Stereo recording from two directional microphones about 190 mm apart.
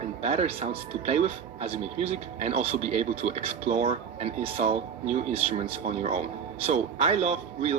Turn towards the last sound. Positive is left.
turn(degrees=-35)  # may be behind; listen again after turning